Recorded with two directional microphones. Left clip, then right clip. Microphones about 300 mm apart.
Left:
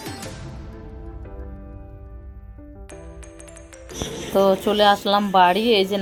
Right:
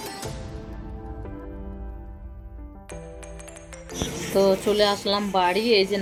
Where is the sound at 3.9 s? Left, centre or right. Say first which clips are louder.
Left 2 dB; centre.